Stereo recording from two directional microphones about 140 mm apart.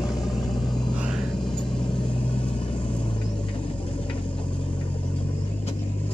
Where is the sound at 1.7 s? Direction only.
35° left (ahead or behind).